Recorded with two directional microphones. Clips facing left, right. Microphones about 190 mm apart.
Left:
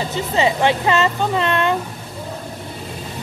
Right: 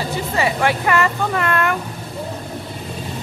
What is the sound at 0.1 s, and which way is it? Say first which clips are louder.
Speech: left 3 dB; 20° left (ahead or behind).